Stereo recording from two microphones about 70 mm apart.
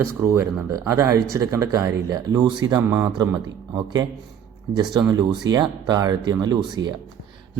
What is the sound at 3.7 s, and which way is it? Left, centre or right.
Speech, right.